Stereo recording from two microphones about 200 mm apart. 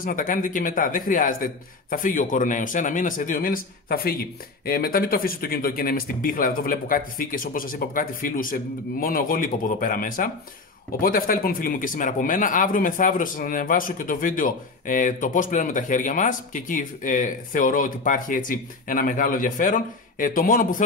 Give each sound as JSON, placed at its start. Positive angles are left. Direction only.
{"t": 0.0, "sound": "speech", "side_deg": 45}